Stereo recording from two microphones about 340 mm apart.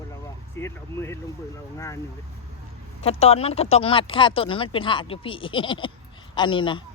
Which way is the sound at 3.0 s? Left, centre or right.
Centre.